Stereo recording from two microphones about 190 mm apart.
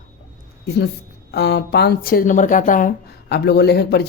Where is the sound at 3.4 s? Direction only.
60° left (ahead or behind).